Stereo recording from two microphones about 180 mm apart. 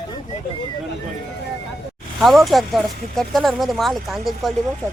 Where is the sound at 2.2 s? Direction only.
Centre (ahead or behind).